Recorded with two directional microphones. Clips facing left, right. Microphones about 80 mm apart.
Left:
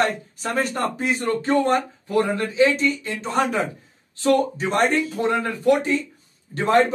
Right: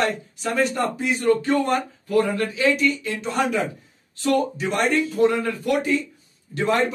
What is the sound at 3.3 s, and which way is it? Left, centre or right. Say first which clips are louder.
A man's voice: left 1 dB; left.